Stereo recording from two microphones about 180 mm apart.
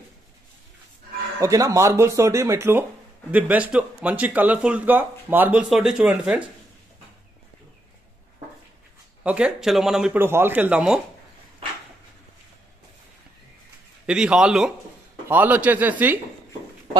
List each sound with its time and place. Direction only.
1.4 s speech: 20° right (ahead or behind)
9.2 s speech: 5° right (ahead or behind)
14.0 s a man's voice: 5° right (ahead or behind)